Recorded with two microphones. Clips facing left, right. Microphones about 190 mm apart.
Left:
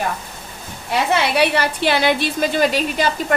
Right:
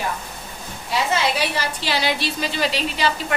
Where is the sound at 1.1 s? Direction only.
65° left (ahead or behind).